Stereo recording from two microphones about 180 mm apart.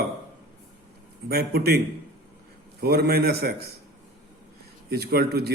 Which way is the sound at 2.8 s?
60° right (ahead or behind).